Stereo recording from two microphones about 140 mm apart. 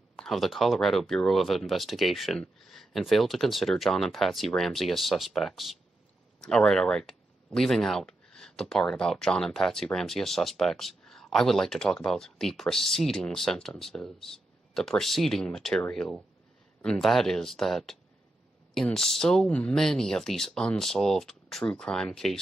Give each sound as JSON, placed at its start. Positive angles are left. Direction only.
{"t": 0.2, "sound": "speech", "side_deg": 0}